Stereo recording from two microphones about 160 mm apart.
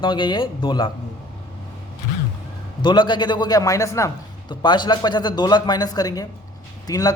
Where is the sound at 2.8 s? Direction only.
30° left (ahead or behind).